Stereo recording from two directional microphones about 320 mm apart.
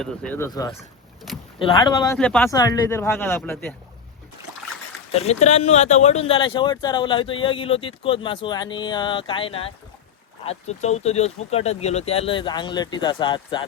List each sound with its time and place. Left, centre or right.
0.0 s speech: centre
5.1 s speech: centre